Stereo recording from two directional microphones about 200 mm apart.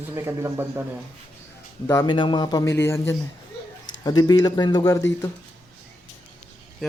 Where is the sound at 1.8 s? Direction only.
20° left (ahead or behind).